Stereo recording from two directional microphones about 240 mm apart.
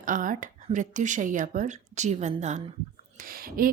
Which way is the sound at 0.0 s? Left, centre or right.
Right.